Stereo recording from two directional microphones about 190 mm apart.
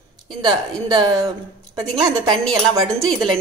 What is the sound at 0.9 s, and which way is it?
A woman's voice, 20° right (ahead or behind).